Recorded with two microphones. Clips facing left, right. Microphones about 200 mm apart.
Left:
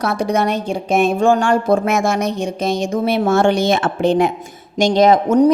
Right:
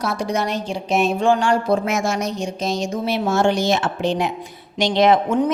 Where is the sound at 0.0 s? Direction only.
60° left (ahead or behind).